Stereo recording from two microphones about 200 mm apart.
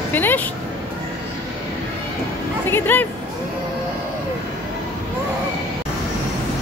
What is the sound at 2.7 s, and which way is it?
Speech, 10° left (ahead or behind).